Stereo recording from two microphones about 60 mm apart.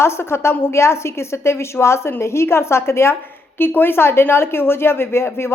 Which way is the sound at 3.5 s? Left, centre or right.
Left.